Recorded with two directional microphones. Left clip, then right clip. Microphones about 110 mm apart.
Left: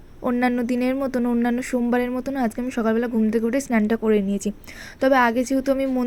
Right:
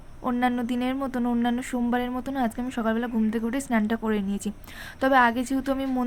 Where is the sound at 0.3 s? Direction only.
35° left (ahead or behind).